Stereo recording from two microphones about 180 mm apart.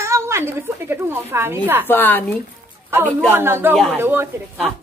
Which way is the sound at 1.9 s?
10° left (ahead or behind).